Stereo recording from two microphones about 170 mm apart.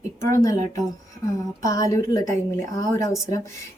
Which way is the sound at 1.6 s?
20° left (ahead or behind).